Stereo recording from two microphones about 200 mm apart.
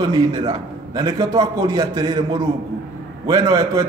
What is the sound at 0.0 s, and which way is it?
A man's voice, 20° right (ahead or behind).